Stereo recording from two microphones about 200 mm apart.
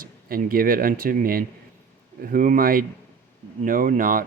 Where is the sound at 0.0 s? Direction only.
45° right (ahead or behind).